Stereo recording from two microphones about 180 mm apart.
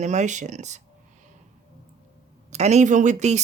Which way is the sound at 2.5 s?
40° right (ahead or behind).